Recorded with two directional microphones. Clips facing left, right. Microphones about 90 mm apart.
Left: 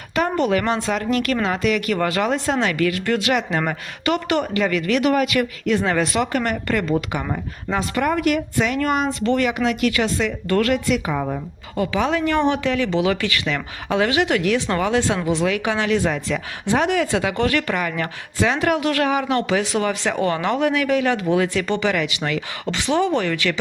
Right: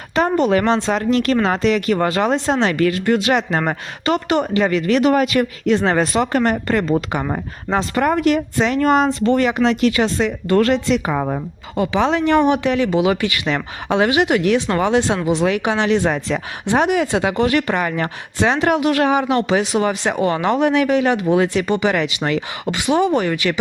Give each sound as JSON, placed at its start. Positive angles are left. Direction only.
{"t": 0.1, "sound": "speech", "side_deg": -30}
{"t": 9.0, "sound": "speech", "side_deg": -20}
{"t": 9.4, "sound": "speech", "side_deg": -35}
{"t": 11.0, "sound": "speech", "side_deg": -40}
{"t": 11.8, "sound": "speech", "side_deg": -25}
{"t": 16.0, "sound": "speech", "side_deg": -35}
{"t": 16.6, "sound": "speech", "side_deg": -20}
{"t": 21.9, "sound": "speech", "side_deg": -30}
{"t": 22.6, "sound": "speech", "side_deg": -15}